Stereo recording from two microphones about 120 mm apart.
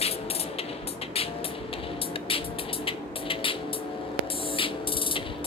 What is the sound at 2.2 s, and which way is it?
Music, 50° left (ahead or behind).